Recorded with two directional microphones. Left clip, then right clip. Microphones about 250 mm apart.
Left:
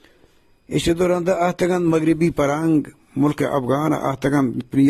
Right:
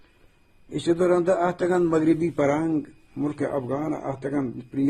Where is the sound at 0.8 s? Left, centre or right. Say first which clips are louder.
Left 2 dB; left.